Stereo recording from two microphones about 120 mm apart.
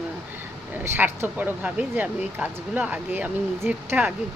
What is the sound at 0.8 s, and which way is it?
Speech, 15° right (ahead or behind).